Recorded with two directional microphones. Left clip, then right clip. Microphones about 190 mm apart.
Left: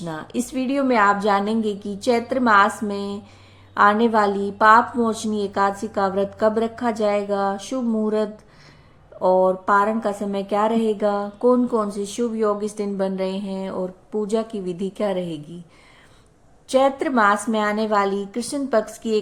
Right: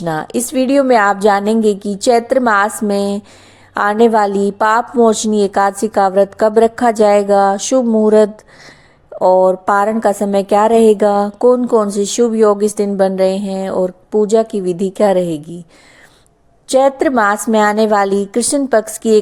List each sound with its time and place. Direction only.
0.0 s a woman's voice: 50° right (ahead or behind)
16.6 s a woman's voice: 40° right (ahead or behind)